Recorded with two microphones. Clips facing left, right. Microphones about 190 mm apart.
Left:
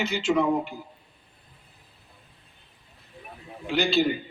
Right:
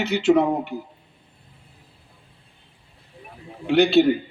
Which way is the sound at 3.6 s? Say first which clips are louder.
Right 8 dB; 65° right (ahead or behind).